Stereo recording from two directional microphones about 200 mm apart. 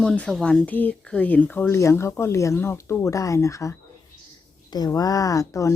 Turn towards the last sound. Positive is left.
turn(degrees=15)  # may be behind; listen again after turning